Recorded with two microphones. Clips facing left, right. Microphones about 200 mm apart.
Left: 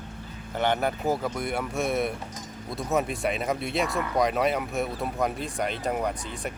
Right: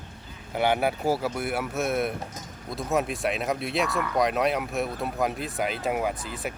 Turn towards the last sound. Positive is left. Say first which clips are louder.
# right 1 dB
turn(degrees=-5)  # may be behind; listen again after turning